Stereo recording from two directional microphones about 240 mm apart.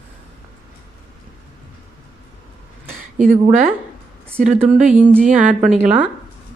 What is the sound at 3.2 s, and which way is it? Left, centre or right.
A woman's voice, right.